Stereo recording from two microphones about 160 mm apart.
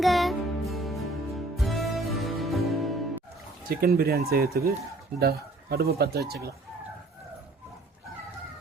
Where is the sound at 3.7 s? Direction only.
70° right (ahead or behind).